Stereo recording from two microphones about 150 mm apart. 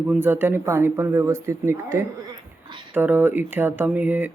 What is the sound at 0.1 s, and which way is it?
Speech, 15° right (ahead or behind).